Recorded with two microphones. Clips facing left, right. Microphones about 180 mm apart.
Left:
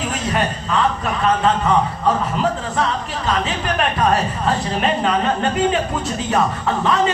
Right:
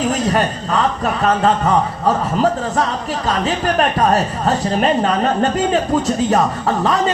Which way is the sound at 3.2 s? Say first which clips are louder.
Right 3 dB; 40° right (ahead or behind).